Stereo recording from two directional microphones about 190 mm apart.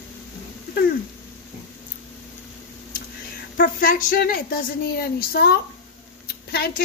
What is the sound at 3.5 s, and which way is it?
A woman's voice, 45° left (ahead or behind).